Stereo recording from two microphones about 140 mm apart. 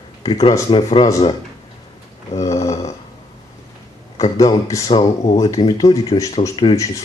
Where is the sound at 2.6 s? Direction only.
50° left (ahead or behind).